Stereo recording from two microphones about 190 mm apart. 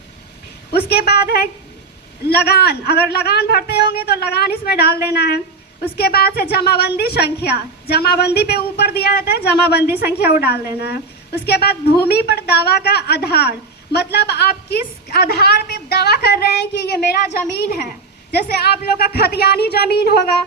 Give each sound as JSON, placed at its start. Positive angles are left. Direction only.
{"t": 0.7, "sound": "a woman's voice", "side_deg": 55}
{"t": 18.3, "sound": "a woman's voice", "side_deg": 55}